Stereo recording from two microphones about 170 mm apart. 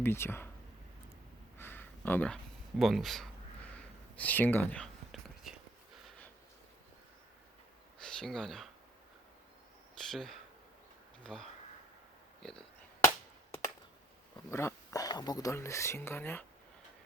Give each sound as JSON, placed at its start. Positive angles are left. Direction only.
{"t": 0.0, "sound": "speech", "side_deg": 15}
{"t": 1.5, "sound": "a sound", "side_deg": 10}
{"t": 3.7, "sound": "whispering", "side_deg": 10}
{"t": 8.0, "sound": "speech", "side_deg": 5}
{"t": 10.0, "sound": "speech", "side_deg": 0}
{"t": 14.5, "sound": "speech", "side_deg": 15}